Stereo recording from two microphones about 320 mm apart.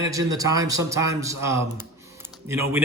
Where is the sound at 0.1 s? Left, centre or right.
Centre.